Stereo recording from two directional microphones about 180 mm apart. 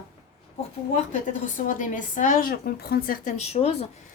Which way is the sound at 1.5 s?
45° left (ahead or behind).